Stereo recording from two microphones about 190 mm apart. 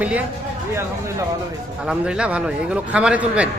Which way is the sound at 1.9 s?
5° right (ahead or behind).